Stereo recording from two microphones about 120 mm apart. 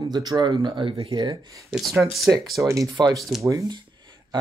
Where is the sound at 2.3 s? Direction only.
15° right (ahead or behind).